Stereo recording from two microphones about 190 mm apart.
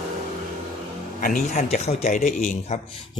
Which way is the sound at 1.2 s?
45° left (ahead or behind).